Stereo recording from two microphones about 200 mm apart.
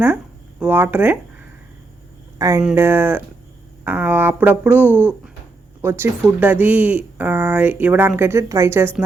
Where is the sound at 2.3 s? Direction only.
15° right (ahead or behind).